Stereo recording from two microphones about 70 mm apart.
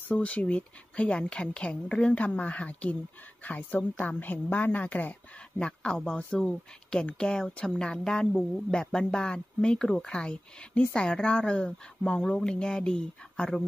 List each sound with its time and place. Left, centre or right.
0.1 s a woman's voice: centre